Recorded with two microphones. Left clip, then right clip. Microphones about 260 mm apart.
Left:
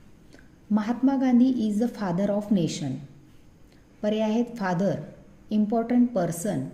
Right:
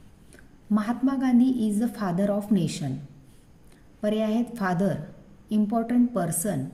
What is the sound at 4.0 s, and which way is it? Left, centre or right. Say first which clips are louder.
A woman's voice: left 1 dB; right.